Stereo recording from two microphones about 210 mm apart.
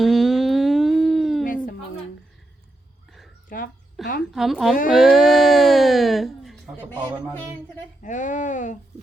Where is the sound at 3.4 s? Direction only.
40° left (ahead or behind).